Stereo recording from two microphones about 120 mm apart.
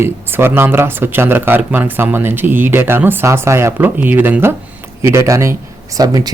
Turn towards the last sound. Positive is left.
turn(degrees=-30)  # may be behind; listen again after turning